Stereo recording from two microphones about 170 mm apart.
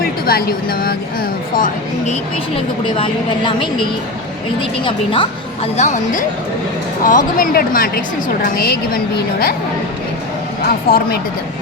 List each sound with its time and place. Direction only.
0.0 s speech: 65° left (ahead or behind)
2.6 s a woman's voice: 30° left (ahead or behind)
5.7 s a woman's voice: 45° left (ahead or behind); by 9.0 s 60° left (ahead or behind)
10.7 s speech: 60° left (ahead or behind)